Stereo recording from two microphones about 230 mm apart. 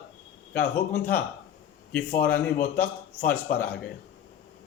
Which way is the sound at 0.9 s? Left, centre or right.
Left.